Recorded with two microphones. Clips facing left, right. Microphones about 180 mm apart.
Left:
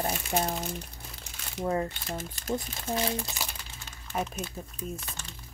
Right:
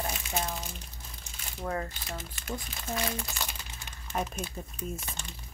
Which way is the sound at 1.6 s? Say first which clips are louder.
Left 5 dB; 25° left (ahead or behind).